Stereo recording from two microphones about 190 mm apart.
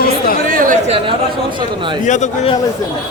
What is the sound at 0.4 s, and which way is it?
A man's voice, 45° right (ahead or behind).